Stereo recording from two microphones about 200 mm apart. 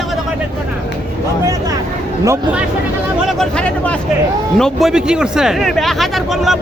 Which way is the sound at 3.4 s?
5° left (ahead or behind).